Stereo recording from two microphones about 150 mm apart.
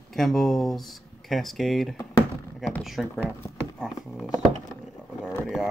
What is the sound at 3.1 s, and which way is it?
Speech, 10° left (ahead or behind).